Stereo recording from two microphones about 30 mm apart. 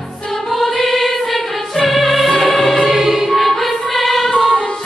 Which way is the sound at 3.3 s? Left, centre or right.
Centre.